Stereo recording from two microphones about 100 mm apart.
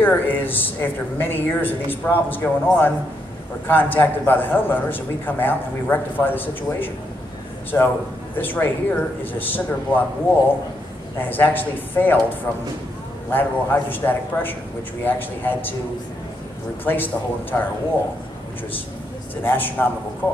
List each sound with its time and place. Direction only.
0.0 s a man's voice: 20° left (ahead or behind)
11.1 s a man's voice: 20° left (ahead or behind)
16.8 s a man's voice: 20° left (ahead or behind)
19.4 s a man's voice: 20° left (ahead or behind)